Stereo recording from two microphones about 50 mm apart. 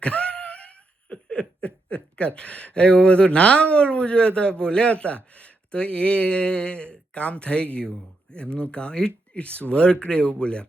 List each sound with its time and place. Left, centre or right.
0.0 s wail: left
1.1 s speech: left